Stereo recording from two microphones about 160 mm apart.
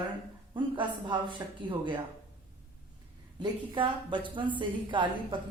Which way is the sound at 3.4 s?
30° right (ahead or behind).